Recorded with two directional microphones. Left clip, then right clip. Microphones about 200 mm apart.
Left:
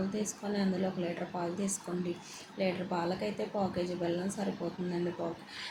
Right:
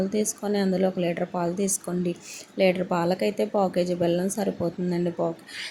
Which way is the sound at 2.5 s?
50° right (ahead or behind).